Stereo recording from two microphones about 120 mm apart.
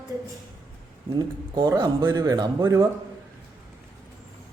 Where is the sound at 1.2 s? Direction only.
35° right (ahead or behind).